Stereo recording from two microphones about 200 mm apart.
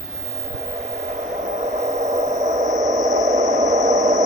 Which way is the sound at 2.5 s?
15° right (ahead or behind).